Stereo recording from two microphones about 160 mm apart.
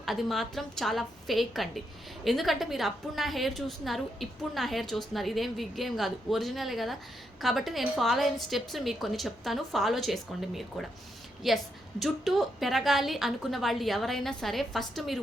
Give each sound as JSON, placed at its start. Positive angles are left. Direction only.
{"t": 0.0, "sound": "a woman's voice", "side_deg": 0}